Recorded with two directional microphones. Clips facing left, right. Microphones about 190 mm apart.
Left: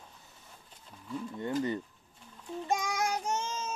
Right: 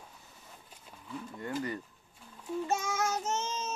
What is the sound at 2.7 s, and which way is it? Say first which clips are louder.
Child singing: left 2 dB; 15° left (ahead or behind).